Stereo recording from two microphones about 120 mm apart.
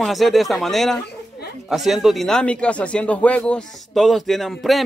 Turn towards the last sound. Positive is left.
turn(degrees=0)  # may be behind; listen again after turning